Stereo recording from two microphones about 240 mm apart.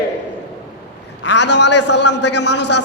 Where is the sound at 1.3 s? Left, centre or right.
Left.